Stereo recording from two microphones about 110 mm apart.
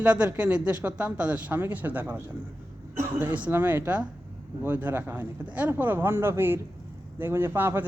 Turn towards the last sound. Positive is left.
turn(degrees=-20)  # may be behind; listen again after turning